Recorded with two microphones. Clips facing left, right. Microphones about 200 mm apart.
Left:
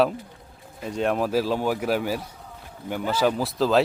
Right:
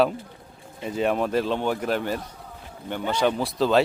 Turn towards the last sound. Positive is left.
turn(degrees=0)  # may be behind; listen again after turning